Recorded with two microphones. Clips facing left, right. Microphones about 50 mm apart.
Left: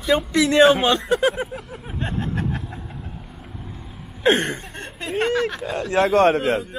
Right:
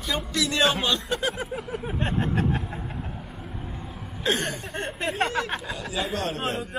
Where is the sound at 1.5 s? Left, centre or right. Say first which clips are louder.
Right 2 dB; centre.